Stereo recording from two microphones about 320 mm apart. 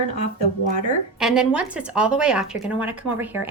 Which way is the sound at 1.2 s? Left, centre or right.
Centre.